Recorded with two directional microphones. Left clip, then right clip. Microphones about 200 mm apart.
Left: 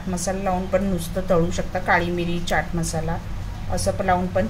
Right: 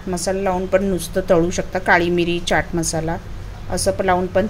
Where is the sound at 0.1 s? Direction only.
45° right (ahead or behind).